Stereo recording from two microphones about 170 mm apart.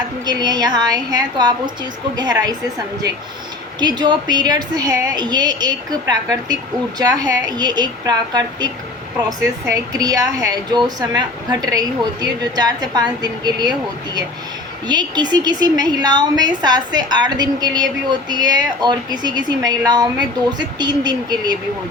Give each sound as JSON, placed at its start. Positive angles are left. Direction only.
{"t": 0.3, "sound": "a woman's voice", "side_deg": -25}
{"t": 14.8, "sound": "a woman's voice", "side_deg": -25}